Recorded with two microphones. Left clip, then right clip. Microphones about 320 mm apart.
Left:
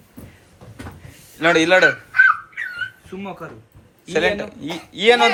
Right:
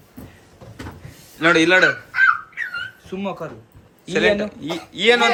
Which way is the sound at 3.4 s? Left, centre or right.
Right.